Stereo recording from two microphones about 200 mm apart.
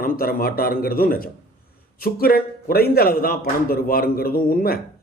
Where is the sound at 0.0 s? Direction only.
45° left (ahead or behind).